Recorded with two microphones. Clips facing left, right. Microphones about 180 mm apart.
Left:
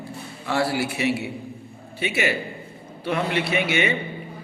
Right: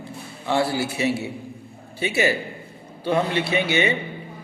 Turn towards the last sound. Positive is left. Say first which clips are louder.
# right 1 dB
turn(degrees=-30)  # may be behind; listen again after turning